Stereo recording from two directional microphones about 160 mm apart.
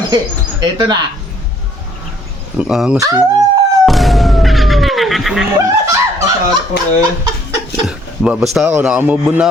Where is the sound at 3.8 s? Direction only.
Centre (ahead or behind).